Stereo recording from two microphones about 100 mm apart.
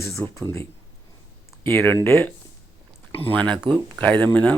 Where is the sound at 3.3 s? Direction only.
10° left (ahead or behind).